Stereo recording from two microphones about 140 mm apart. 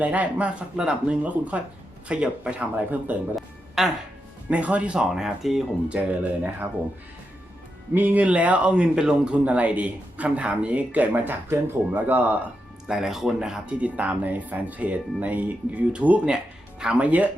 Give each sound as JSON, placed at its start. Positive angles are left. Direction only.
{"t": 0.0, "sound": "speech", "side_deg": -10}
{"t": 7.9, "sound": "speech", "side_deg": -10}